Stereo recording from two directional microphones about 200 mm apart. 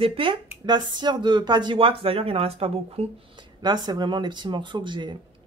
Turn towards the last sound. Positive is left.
turn(degrees=-25)  # may be behind; listen again after turning